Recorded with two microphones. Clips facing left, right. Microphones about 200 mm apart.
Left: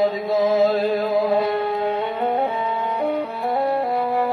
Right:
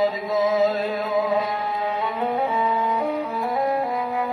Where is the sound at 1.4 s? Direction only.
65° left (ahead or behind).